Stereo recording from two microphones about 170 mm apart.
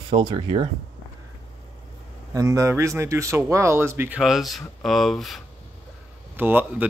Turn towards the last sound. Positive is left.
turn(degrees=-10)  # may be behind; listen again after turning